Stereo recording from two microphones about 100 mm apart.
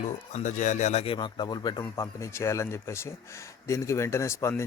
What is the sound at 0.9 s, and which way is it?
Speech, 90° left.